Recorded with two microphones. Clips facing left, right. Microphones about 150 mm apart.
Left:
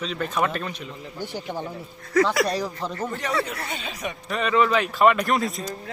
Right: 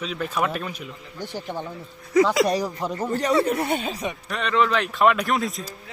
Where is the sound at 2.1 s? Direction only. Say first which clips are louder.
Right 2 dB; 15° right (ahead or behind).